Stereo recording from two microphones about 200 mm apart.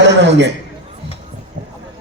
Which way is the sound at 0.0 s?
60° right (ahead or behind).